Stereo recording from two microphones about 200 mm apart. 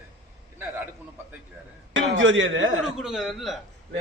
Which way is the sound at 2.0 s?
70° right (ahead or behind).